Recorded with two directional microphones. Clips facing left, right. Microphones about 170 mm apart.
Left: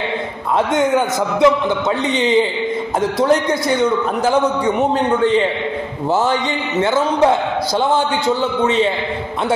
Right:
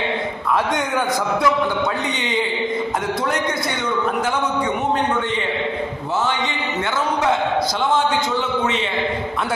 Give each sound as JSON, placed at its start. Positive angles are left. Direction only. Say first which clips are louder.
{"t": 0.7, "sound": "a man's voice", "louder": "left 6 dB", "side_deg": 25}